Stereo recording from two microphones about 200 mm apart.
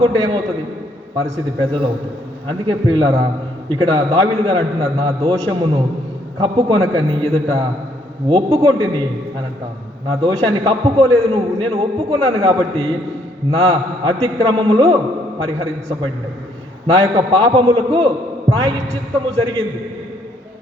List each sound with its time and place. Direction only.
0.0 s a man's voice: 25° right (ahead or behind)
10.1 s a man's voice: 25° right (ahead or behind)
16.8 s a man's voice: 25° right (ahead or behind)